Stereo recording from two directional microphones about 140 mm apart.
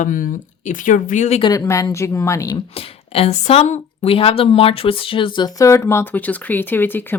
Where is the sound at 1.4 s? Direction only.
25° left (ahead or behind).